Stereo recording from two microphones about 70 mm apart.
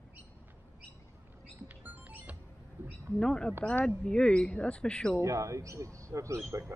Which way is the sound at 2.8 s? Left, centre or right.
Right.